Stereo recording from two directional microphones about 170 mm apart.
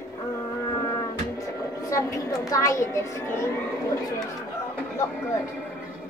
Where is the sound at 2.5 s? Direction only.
20° left (ahead or behind).